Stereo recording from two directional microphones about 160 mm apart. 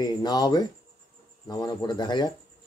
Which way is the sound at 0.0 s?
25° left (ahead or behind).